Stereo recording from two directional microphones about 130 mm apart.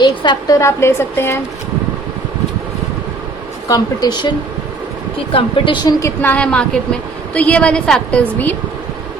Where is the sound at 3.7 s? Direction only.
30° left (ahead or behind).